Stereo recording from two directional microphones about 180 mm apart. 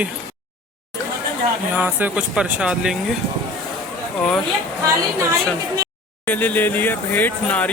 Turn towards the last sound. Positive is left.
turn(degrees=10)  # may be behind; listen again after turning